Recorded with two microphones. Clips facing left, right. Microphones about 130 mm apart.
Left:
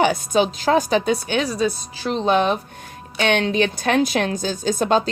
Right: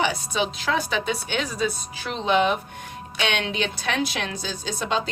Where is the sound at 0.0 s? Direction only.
45° left (ahead or behind).